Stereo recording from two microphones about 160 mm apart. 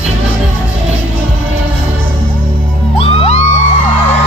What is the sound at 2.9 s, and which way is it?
Music, 35° left (ahead or behind).